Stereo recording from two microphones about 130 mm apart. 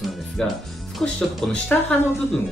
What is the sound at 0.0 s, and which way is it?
Speech, centre (ahead or behind).